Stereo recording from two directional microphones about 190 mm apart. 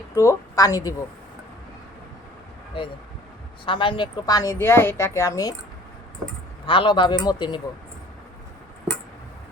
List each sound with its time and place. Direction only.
0.2 s a woman's voice: 15° left (ahead or behind)
2.8 s a woman's voice: 25° left (ahead or behind)
6.7 s speech: 25° left (ahead or behind)